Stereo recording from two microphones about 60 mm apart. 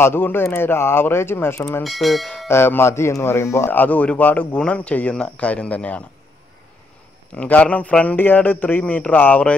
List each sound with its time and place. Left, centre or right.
0.0 s speech: left
1.8 s speech: centre
2.4 s speech: left
3.7 s a man's voice: left
7.3 s a man's voice: left